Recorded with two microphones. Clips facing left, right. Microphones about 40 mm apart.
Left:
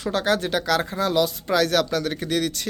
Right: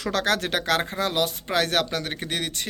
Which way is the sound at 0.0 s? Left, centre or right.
Right.